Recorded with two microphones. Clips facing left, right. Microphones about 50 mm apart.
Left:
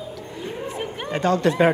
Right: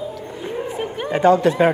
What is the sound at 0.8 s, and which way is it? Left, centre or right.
Speech, centre.